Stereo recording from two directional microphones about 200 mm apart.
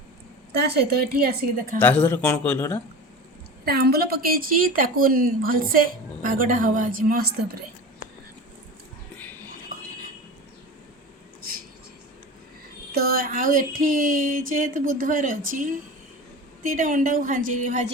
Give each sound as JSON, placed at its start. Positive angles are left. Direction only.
{"t": 0.5, "sound": "a woman's voice", "side_deg": -55}
{"t": 1.8, "sound": "speech", "side_deg": 10}
{"t": 3.7, "sound": "a woman's voice", "side_deg": -50}
{"t": 12.9, "sound": "a woman's voice", "side_deg": -45}